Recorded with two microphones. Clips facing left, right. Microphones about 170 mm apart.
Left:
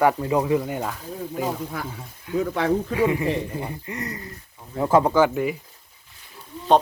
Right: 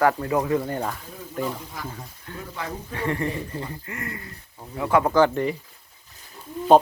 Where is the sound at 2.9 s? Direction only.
10° left (ahead or behind).